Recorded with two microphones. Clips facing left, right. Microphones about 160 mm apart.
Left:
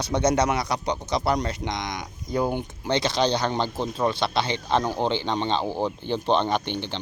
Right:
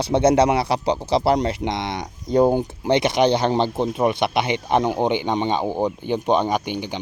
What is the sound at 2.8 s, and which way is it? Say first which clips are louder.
Speech: right 5 dB; 20° right (ahead or behind).